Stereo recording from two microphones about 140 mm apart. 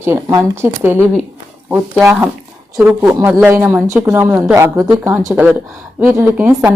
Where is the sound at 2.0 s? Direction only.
10° right (ahead or behind).